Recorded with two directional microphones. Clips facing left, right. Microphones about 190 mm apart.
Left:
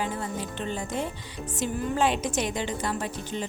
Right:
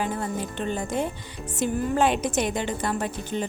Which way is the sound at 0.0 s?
50° right (ahead or behind).